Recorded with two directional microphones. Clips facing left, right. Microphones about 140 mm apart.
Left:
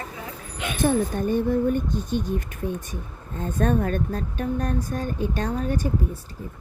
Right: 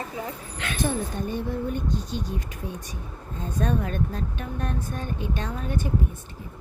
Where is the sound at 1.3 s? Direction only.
50° left (ahead or behind).